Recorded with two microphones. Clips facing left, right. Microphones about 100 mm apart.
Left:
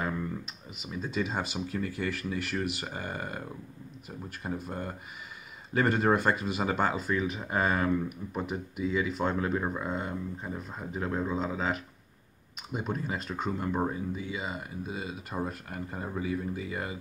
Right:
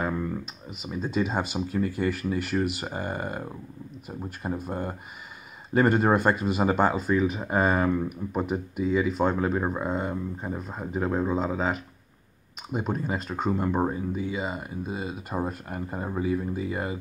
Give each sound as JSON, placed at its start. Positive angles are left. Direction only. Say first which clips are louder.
{"t": 0.0, "sound": "clicking", "louder": "right 4 dB", "side_deg": -25}
{"t": 0.8, "sound": "speech", "louder": "right 5 dB", "side_deg": -30}
{"t": 1.8, "sound": "speech", "louder": "right 7 dB", "side_deg": -30}